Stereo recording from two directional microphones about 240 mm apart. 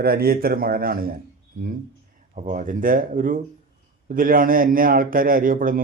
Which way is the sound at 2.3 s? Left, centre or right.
Right.